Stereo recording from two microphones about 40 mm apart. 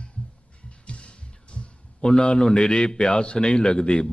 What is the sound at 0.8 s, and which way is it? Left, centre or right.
A man's voice, left.